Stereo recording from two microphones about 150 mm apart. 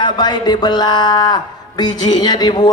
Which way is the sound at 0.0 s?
30° left (ahead or behind).